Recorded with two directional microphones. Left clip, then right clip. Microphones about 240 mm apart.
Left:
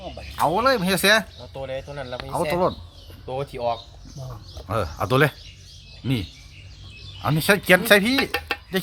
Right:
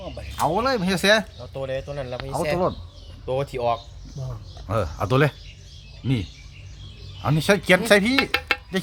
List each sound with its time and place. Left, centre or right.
0.3 s speech: centre
1.4 s speech: right
2.3 s speech: centre
3.2 s speech: right
4.3 s speech: centre